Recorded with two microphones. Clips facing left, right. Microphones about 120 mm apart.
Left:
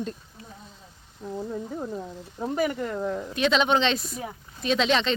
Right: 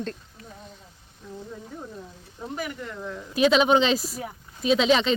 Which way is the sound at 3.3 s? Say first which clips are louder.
Right 4 dB; 5° right (ahead or behind).